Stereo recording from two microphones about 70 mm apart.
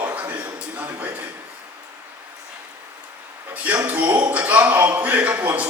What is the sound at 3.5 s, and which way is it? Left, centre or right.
A man's voice, right.